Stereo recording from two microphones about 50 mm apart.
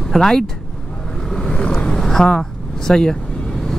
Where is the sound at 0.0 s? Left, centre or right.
Centre.